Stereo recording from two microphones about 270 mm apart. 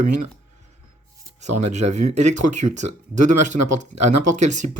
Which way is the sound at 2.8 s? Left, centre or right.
Right.